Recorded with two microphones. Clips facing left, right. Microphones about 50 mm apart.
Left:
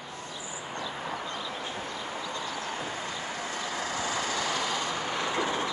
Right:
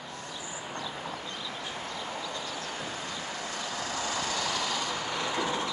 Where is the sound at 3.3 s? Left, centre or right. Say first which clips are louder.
Left 2 dB; left.